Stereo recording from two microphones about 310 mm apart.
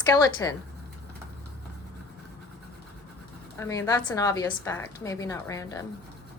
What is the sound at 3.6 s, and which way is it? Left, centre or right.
A woman's voice, centre.